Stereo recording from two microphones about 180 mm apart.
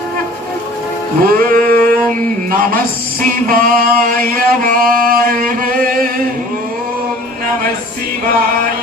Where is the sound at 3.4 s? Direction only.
50° right (ahead or behind).